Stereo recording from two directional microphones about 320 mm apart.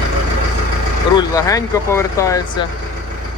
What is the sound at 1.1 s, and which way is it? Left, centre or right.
Speech, centre.